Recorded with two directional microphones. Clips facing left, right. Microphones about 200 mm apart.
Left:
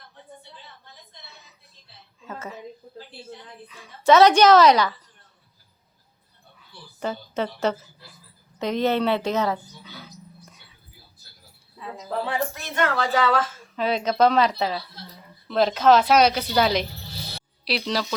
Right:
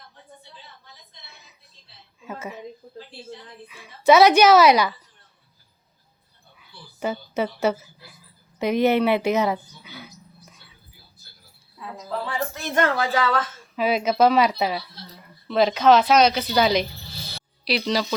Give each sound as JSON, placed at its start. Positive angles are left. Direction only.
{"t": 2.2, "sound": "a sound", "side_deg": -10}
{"t": 3.7, "sound": "speech", "side_deg": -10}
{"t": 6.6, "sound": "a sound", "side_deg": -10}
{"t": 8.5, "sound": "speech", "side_deg": -10}
{"t": 12.6, "sound": "speech", "side_deg": -45}
{"t": 13.0, "sound": "speech", "side_deg": -5}